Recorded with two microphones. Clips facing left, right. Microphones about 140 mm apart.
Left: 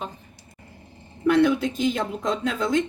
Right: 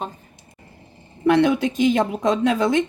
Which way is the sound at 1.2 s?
90° right.